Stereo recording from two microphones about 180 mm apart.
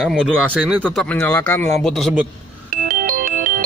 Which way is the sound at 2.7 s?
50° right (ahead or behind).